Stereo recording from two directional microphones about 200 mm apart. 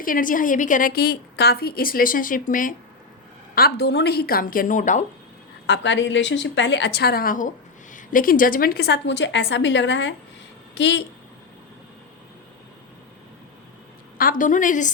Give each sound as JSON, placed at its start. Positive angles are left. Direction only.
{"t": 0.0, "sound": "a woman's voice", "side_deg": 45}
{"t": 3.5, "sound": "a woman's voice", "side_deg": 50}
{"t": 5.6, "sound": "a woman's voice", "side_deg": 60}
{"t": 14.2, "sound": "a woman's voice", "side_deg": 45}